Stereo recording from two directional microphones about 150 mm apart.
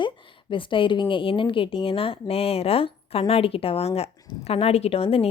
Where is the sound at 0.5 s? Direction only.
35° left (ahead or behind).